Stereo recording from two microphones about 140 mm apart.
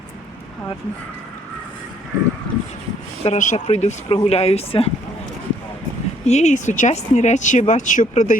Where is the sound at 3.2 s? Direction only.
55° left (ahead or behind).